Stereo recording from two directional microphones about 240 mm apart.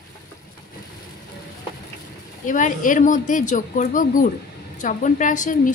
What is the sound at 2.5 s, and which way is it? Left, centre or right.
Speech, left.